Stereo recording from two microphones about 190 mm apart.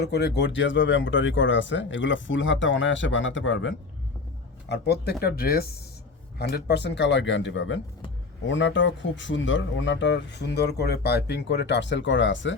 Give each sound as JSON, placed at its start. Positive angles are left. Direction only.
{"t": 0.0, "sound": "speech", "side_deg": 60}
{"t": 4.7, "sound": "speech", "side_deg": 60}